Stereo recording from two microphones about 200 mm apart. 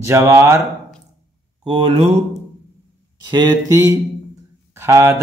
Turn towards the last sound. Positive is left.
turn(degrees=-15)  # may be behind; listen again after turning